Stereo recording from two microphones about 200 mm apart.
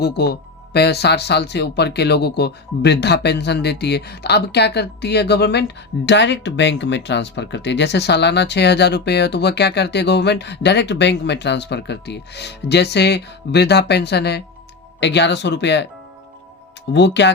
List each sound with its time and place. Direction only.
0.0 s speech: 55° left (ahead or behind)
16.9 s speech: 60° left (ahead or behind)